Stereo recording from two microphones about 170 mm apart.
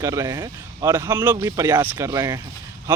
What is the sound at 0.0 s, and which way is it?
Speech, 20° right (ahead or behind).